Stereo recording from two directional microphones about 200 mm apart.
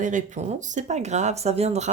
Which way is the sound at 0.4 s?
35° right (ahead or behind).